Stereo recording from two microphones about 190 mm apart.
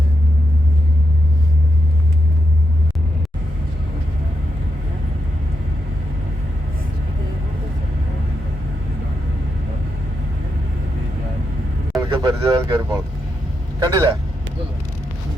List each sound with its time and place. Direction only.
11.9 s vehicle: 25° right (ahead or behind)
13.7 s speech: 20° right (ahead or behind)